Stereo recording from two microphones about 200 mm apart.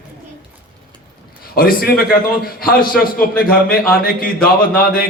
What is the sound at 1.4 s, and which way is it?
A man's voice, 50° left (ahead or behind).